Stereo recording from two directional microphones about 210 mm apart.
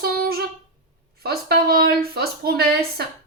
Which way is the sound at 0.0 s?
50° right (ahead or behind).